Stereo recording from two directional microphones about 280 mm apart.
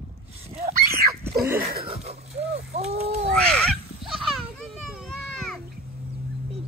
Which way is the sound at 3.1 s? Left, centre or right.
Right.